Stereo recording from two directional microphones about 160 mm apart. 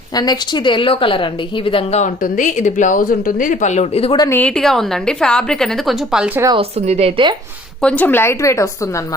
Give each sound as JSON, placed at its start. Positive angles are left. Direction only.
{"t": 0.1, "sound": "a woman's voice", "side_deg": 25}
{"t": 4.3, "sound": "a woman's voice", "side_deg": 10}
{"t": 6.5, "sound": "speech", "side_deg": -40}
{"t": 7.8, "sound": "a woman's voice", "side_deg": 10}